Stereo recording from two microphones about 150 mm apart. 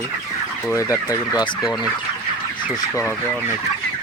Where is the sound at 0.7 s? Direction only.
20° left (ahead or behind).